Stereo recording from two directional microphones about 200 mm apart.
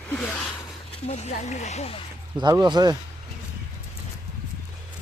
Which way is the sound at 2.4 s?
20° right (ahead or behind).